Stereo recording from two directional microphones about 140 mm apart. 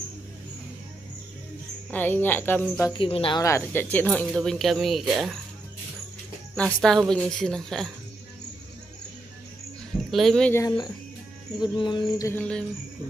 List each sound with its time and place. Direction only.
1.9 s speech: 15° left (ahead or behind)
2.9 s a sound: 40° left (ahead or behind)
3.3 s speech: 20° left (ahead or behind); by 5.4 s centre (ahead or behind)
6.5 s speech: 5° left (ahead or behind)
10.1 s speech: centre (ahead or behind)
10.5 s speech: 20° left (ahead or behind)
11.6 s a sound: 35° left (ahead or behind)
12.3 s speech: 10° left (ahead or behind)